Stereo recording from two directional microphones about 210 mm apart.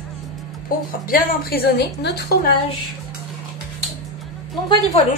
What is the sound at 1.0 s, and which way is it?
Speech, 45° left (ahead or behind).